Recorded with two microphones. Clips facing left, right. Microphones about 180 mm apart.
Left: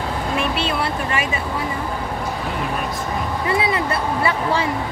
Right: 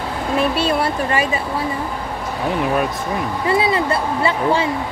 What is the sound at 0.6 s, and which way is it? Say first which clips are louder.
Speech: right 4 dB; 35° right (ahead or behind).